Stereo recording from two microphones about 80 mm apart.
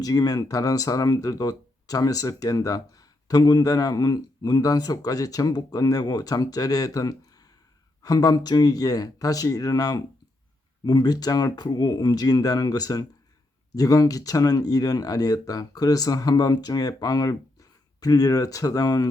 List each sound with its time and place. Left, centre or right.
0.0 s speech: left